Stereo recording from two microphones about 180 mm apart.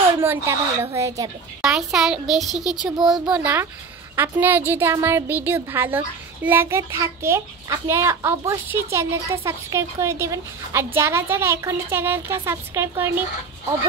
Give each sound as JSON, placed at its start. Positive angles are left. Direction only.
{"t": 0.1, "sound": "a woman's voice", "side_deg": -15}
{"t": 1.6, "sound": "a woman's voice", "side_deg": 0}